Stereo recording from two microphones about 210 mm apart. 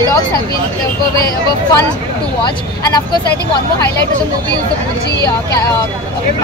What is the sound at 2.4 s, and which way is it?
Speech, 20° left (ahead or behind).